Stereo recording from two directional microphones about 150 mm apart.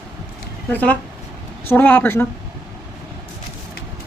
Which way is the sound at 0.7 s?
10° left (ahead or behind).